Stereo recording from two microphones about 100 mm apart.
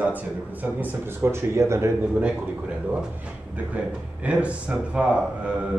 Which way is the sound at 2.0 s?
10° right (ahead or behind).